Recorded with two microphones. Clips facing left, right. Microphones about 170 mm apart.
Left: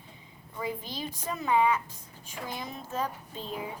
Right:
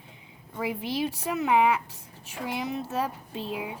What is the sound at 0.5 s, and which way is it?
A woman's voice, 75° right (ahead or behind).